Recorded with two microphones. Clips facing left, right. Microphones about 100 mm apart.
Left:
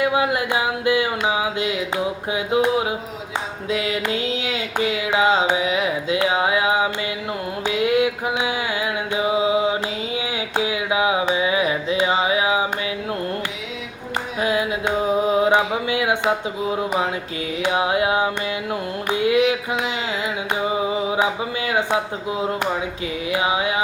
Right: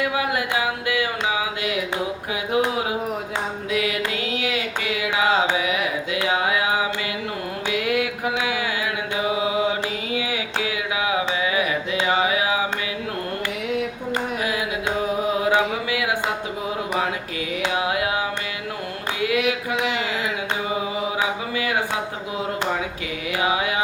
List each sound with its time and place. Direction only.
0.0 s carnatic music: 25° left (ahead or behind)
3.7 s carnatic music: 30° left (ahead or behind)
7.7 s mantra: 25° left (ahead or behind)
10.2 s carnatic music: 25° left (ahead or behind)
15.4 s a sound: 25° left (ahead or behind)
17.6 s carnatic music: 25° left (ahead or behind)
23.3 s carnatic music: 25° left (ahead or behind)